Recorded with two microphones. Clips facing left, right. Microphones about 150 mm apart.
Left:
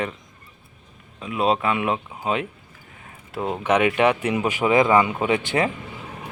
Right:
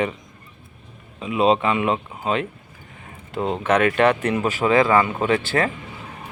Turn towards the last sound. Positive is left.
turn(degrees=15)  # may be behind; listen again after turning